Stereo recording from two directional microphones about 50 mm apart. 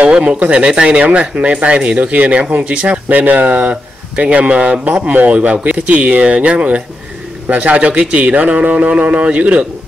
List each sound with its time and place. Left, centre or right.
0.0 s speech: right